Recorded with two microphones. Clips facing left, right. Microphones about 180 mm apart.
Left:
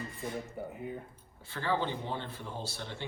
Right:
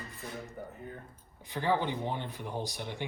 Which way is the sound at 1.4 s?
15° right (ahead or behind).